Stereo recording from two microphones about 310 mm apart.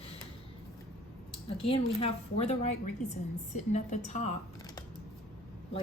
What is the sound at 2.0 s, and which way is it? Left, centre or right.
A woman's voice, centre.